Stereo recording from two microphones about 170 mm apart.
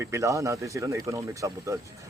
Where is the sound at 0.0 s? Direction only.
15° right (ahead or behind).